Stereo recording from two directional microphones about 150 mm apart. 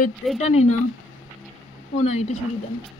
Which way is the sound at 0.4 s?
45° left (ahead or behind).